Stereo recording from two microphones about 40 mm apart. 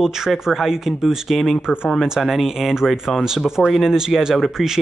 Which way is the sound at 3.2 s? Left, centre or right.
Centre.